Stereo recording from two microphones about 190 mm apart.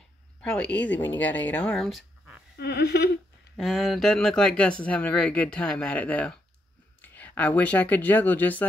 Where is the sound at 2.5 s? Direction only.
60° left (ahead or behind).